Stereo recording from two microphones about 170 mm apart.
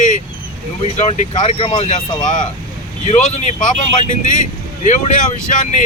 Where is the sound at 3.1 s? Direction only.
40° left (ahead or behind).